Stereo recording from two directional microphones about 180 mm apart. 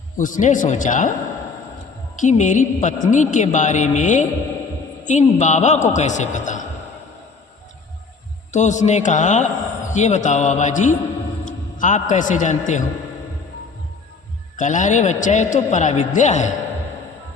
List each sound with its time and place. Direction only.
0.2 s speech: 45° left (ahead or behind)
2.1 s a man's voice: 45° left (ahead or behind)
8.5 s a man's voice: 40° left (ahead or behind)
14.5 s a man's voice: 45° left (ahead or behind)